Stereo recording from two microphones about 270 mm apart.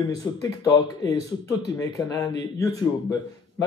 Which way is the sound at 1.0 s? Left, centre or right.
Right.